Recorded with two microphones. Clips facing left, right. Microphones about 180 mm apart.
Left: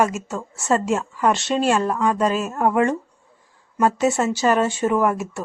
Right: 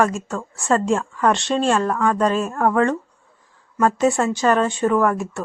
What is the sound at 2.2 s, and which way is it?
Speech, 5° left (ahead or behind).